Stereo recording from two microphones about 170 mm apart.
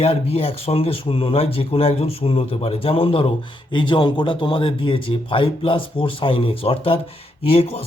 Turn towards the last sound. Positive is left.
turn(degrees=35)  # may be behind; listen again after turning